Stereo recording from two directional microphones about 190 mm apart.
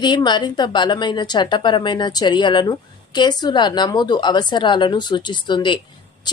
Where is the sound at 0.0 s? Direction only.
25° left (ahead or behind).